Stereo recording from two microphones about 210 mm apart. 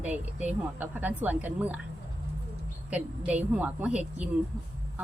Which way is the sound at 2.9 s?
5° right (ahead or behind).